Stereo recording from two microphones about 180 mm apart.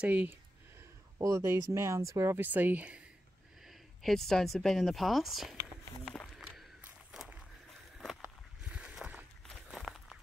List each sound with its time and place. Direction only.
0.0 s speech: 10° right (ahead or behind)
6.0 s a sound: centre (ahead or behind)
8.2 s walk: 5° right (ahead or behind)